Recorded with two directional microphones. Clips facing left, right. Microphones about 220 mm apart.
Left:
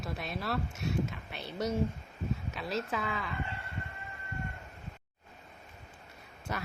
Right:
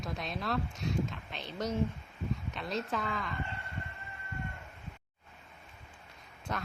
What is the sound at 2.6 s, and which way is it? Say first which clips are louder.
Speech: left 1 dB; 5° left (ahead or behind).